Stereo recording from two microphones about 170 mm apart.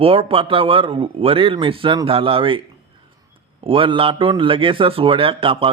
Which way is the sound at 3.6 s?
30° right (ahead or behind).